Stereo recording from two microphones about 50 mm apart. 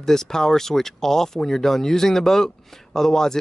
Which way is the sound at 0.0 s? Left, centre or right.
Centre.